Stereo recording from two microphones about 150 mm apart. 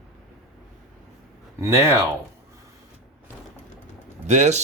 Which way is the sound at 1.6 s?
20° right (ahead or behind).